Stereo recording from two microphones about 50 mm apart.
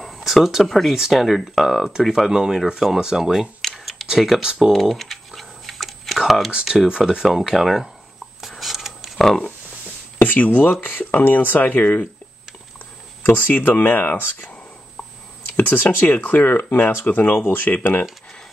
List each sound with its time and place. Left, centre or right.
0.0 s a sound: centre
0.9 s speech: centre
3.6 s computer keyboard: centre
4.1 s speech: centre
4.4 s speech: centre
4.7 s a sound: centre
6.9 s speech: centre
7.2 s speech: centre
8.4 s a sound: centre
10.1 s speech: left
13.2 s speech: left
15.5 s speech: left